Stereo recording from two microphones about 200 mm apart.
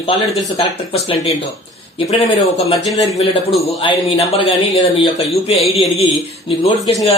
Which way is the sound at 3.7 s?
25° left (ahead or behind).